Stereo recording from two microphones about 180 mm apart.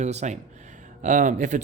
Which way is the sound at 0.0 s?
40° right (ahead or behind).